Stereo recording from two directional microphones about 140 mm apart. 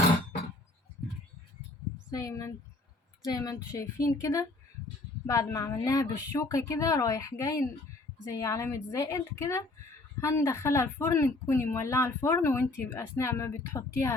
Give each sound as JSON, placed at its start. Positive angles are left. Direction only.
{"t": 2.0, "sound": "speech", "side_deg": 25}